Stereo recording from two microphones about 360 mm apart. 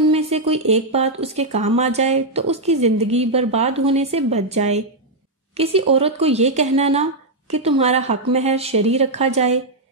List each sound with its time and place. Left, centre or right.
0.1 s speech: centre